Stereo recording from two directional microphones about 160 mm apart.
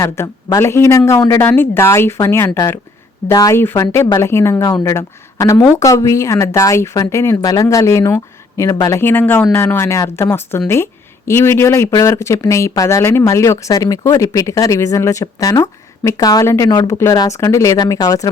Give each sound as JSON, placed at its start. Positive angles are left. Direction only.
{"t": 0.0, "sound": "speech", "side_deg": 15}